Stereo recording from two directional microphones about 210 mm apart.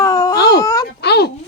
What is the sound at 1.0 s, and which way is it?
Speech, 50° left (ahead or behind).